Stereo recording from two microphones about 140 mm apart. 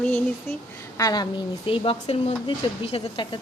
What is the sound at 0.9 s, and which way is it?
Speech, 25° left (ahead or behind).